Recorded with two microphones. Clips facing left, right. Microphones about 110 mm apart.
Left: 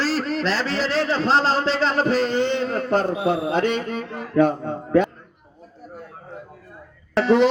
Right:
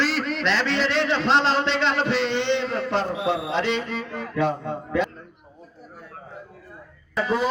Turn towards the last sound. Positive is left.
turn(degrees=75)  # may be behind; listen again after turning